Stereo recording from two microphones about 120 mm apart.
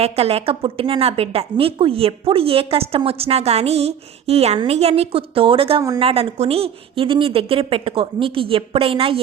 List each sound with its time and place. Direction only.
0.0 s a woman's voice: 55° right (ahead or behind)